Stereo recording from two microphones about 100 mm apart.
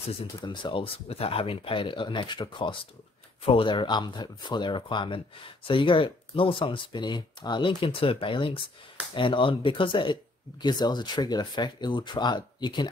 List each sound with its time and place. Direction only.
0.5 s speech: 50° left (ahead or behind)